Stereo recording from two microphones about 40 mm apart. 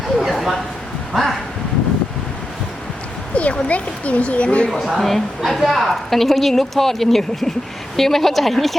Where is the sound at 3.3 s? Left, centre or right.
Left.